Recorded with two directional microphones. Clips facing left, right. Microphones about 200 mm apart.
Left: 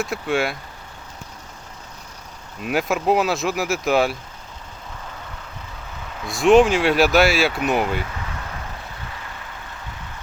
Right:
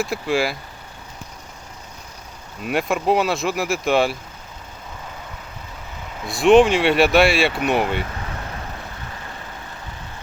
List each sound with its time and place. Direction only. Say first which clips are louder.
0.0 s speech: right 1 dB; centre (ahead or behind)
2.6 s speech: even; centre (ahead or behind)
6.2 s speech: right 1 dB; centre (ahead or behind)